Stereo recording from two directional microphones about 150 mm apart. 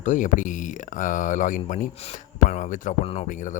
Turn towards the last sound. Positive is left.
turn(degrees=60)  # may be behind; listen again after turning